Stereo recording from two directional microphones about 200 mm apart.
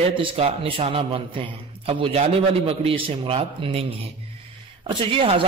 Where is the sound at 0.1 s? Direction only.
25° right (ahead or behind).